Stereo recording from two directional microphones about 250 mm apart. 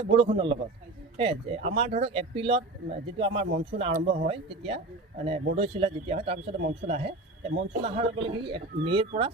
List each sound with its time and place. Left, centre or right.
0.1 s speech: right